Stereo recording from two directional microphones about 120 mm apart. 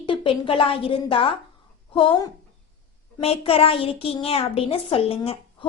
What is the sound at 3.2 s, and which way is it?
A woman's voice, 55° left (ahead or behind).